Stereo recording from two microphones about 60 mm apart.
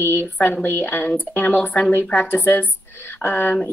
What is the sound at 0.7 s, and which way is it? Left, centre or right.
A woman's voice, left.